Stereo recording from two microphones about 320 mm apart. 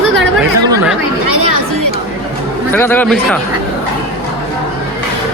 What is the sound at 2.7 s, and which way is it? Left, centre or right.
Speech, centre.